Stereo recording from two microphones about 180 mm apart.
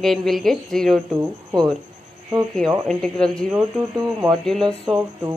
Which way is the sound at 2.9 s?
5° left (ahead or behind).